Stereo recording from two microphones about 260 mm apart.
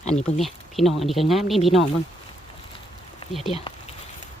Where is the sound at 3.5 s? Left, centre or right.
Left.